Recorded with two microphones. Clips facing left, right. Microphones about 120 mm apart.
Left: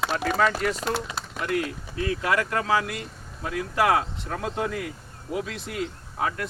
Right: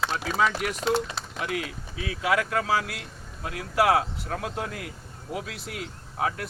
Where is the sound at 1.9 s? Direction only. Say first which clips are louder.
Left 1 dB; 5° right (ahead or behind).